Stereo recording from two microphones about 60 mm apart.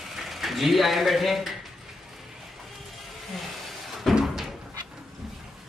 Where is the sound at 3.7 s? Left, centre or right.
Centre.